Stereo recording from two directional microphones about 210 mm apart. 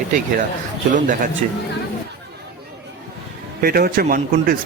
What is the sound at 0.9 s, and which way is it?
Speech, 40° right (ahead or behind).